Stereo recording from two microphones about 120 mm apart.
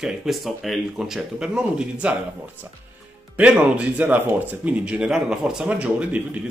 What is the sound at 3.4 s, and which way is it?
Speech, 10° right (ahead or behind).